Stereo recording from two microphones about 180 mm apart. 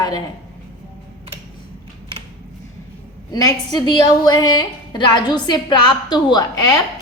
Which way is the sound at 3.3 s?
20° left (ahead or behind).